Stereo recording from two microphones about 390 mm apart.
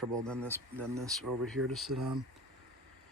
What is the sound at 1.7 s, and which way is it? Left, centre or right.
Speech, centre.